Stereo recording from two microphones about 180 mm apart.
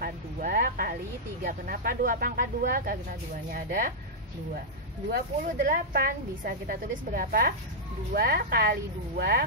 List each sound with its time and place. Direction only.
0.0 s a sound: 55° right (ahead or behind)
1.4 s speech: 55° right (ahead or behind)
5.1 s speech: 60° right (ahead or behind)